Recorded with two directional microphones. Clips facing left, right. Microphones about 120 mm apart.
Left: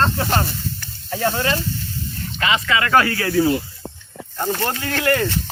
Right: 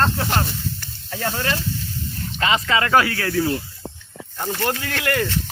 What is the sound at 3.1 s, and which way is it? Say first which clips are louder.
Speech: left 3 dB; 10° left (ahead or behind).